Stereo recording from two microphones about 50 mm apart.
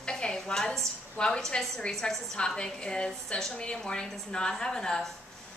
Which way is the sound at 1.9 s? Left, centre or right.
Centre.